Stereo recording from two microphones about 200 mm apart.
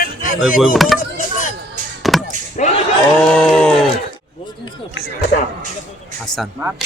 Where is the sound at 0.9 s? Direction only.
40° left (ahead or behind).